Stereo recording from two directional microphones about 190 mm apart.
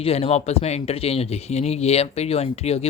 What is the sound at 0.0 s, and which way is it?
A man's voice, 30° left (ahead or behind).